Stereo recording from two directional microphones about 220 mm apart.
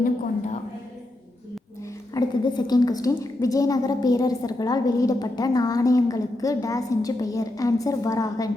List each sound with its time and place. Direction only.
2.1 s a woman's voice: 20° left (ahead or behind)